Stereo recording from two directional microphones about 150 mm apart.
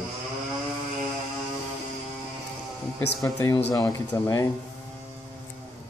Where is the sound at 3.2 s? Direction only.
20° left (ahead or behind).